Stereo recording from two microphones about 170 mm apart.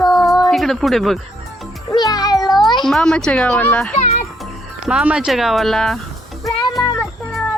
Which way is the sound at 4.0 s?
40° left (ahead or behind).